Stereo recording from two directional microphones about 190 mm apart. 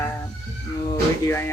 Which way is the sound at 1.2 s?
10° left (ahead or behind).